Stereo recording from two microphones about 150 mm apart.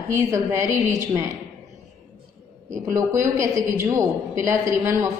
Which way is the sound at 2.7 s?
20° right (ahead or behind).